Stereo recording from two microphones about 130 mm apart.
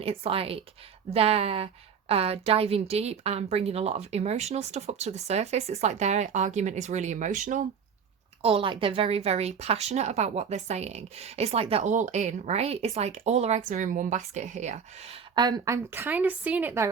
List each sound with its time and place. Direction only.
0.0 s a woman's voice: 45° right (ahead or behind); by 7.6 s 80° right
8.4 s a woman's voice: 45° right (ahead or behind)
15.4 s a woman's voice: 30° right (ahead or behind)